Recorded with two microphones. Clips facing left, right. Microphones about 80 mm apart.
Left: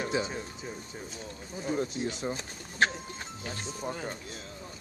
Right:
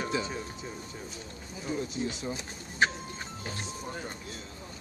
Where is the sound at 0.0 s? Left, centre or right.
Left.